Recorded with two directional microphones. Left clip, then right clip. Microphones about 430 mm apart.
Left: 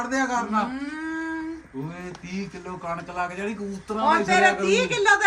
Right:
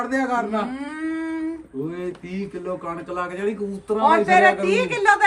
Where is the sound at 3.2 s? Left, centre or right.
Centre.